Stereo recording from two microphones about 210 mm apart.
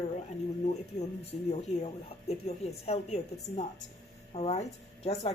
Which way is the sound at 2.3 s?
30° left (ahead or behind).